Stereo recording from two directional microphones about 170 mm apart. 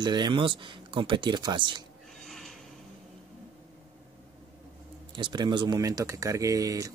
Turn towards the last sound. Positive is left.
turn(degrees=-20)  # may be behind; listen again after turning